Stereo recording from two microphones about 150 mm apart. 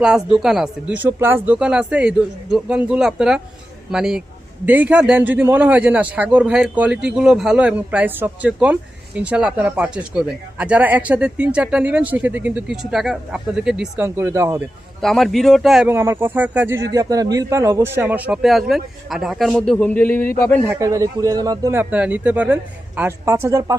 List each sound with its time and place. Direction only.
0.0 s a man's voice: 5° right (ahead or behind)
14.2 s a man's voice: 15° right (ahead or behind)
15.0 s speech: centre (ahead or behind)
15.9 s a man's voice: 15° right (ahead or behind); by 20.3 s 15° left (ahead or behind)
20.7 s a man's voice: 20° right (ahead or behind)